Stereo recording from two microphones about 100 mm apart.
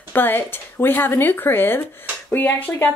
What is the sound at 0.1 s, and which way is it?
A woman's voice, 20° left (ahead or behind).